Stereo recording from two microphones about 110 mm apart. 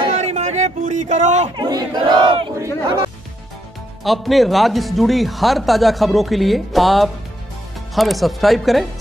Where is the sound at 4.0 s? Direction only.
Centre (ahead or behind).